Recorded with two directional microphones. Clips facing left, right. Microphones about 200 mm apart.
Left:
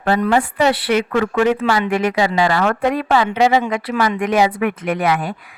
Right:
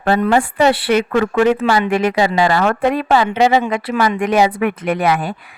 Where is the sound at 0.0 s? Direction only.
30° right (ahead or behind).